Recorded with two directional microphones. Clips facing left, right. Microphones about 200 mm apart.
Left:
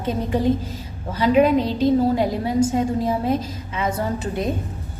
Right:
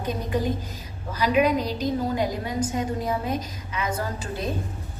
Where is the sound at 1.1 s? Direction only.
25° left (ahead or behind).